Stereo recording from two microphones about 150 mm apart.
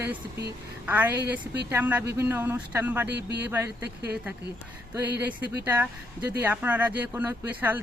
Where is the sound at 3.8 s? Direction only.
90° right.